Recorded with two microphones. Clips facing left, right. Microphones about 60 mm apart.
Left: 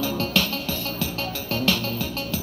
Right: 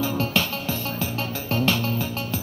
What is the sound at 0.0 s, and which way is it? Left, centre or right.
Music, right.